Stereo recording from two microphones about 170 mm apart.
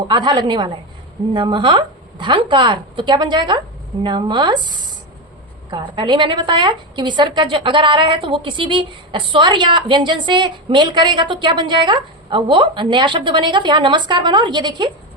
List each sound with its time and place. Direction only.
0.1 s a woman's voice: 25° right (ahead or behind)